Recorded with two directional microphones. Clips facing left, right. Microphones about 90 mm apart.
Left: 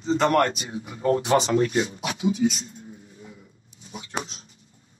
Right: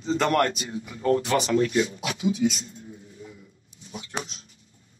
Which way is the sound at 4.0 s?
25° left (ahead or behind).